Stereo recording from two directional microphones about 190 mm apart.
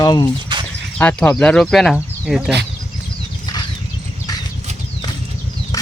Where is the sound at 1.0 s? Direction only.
10° left (ahead or behind).